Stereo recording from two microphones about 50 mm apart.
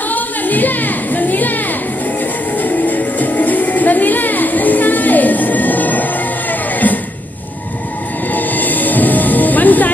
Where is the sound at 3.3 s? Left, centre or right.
Left.